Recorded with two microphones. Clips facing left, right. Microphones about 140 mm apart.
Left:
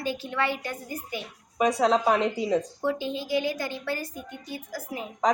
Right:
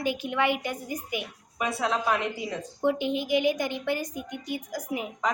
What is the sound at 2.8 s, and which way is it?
A woman's voice, 20° right (ahead or behind).